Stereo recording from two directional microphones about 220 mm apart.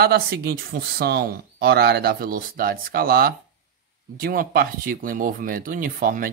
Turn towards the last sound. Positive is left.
turn(degrees=-40)  # may be behind; listen again after turning